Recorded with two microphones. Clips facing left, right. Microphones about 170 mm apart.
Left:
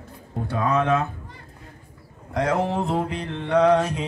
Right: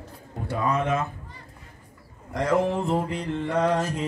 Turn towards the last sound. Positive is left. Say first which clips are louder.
# left 5 dB
turn(degrees=70)  # may be behind; listen again after turning